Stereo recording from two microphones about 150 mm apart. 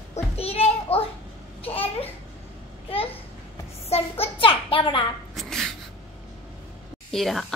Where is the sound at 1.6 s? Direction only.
40° left (ahead or behind).